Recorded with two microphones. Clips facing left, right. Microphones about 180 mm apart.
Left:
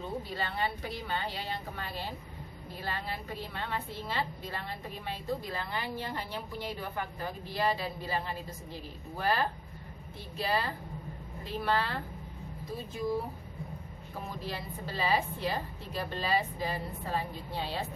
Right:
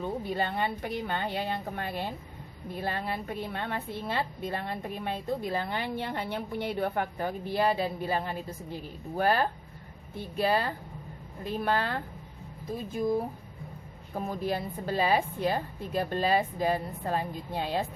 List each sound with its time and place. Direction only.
0.0 s a woman's voice: 55° right (ahead or behind)
14.1 s a woman's voice: 50° right (ahead or behind)